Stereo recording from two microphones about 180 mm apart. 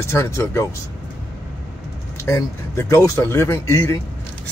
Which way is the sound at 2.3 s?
15° left (ahead or behind).